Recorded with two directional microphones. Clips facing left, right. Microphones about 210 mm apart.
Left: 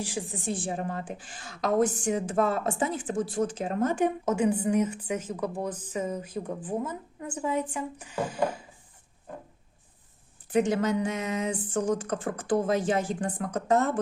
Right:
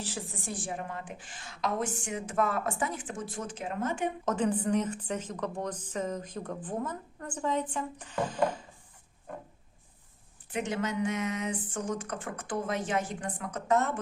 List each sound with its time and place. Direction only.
0.0 s a woman's voice: 15° left (ahead or behind)
0.6 s a woman's voice: 35° left (ahead or behind)
4.3 s a woman's voice: 10° left (ahead or behind)
10.5 s a woman's voice: 35° left (ahead or behind)